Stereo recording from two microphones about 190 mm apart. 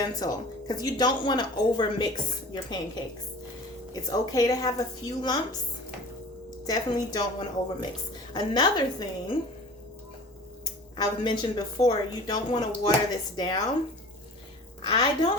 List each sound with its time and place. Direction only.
0.0 s speech: 20° left (ahead or behind)
6.7 s speech: 20° left (ahead or behind)
10.6 s speech: 20° left (ahead or behind)
14.8 s speech: 25° left (ahead or behind)